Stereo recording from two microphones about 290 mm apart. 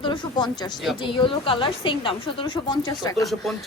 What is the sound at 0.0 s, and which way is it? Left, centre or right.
A woman's voice, centre.